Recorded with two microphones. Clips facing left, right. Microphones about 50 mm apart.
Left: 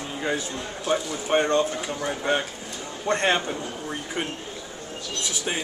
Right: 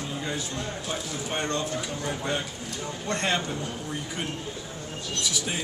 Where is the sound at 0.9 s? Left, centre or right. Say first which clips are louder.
Left 11 dB; left.